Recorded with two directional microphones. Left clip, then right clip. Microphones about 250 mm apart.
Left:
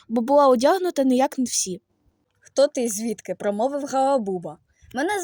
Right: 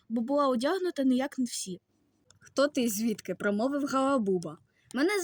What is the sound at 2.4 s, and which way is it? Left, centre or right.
A woman's voice, left.